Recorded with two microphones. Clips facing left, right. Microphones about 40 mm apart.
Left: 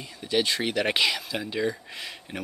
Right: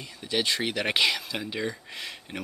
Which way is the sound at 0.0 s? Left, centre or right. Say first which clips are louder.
Left 3 dB; centre.